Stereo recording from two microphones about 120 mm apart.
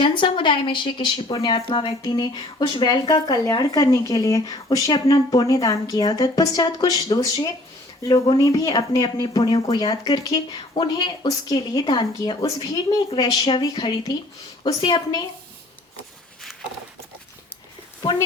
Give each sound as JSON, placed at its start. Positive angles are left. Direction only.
{"t": 0.0, "sound": "speech", "side_deg": 45}